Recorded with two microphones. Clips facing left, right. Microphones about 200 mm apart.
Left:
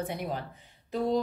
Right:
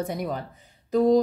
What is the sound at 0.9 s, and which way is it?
Speech, 40° right (ahead or behind).